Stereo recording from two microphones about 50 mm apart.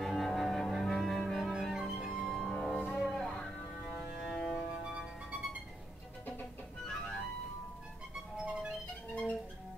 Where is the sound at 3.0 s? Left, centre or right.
Centre.